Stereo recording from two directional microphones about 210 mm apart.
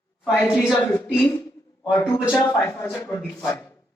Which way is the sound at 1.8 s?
20° left (ahead or behind).